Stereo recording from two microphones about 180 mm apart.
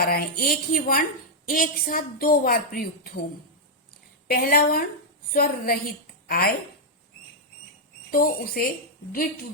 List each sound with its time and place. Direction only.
0.0 s a woman's voice: 60° left (ahead or behind)
4.3 s a woman's voice: 55° left (ahead or behind)
8.1 s a woman's voice: 55° left (ahead or behind)